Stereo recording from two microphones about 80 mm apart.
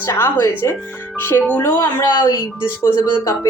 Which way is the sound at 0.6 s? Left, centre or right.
Left.